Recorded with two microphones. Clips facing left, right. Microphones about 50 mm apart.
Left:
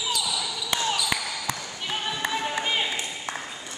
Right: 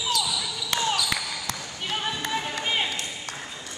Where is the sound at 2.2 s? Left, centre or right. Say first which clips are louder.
Left 2 dB; centre.